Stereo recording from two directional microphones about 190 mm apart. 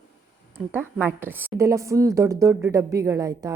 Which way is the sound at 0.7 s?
10° right (ahead or behind).